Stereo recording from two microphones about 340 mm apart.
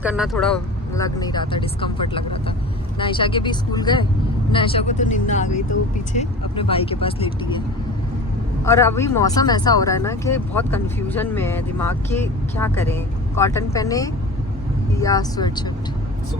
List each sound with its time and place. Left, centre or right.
0.0 s speech: centre
8.6 s speech: centre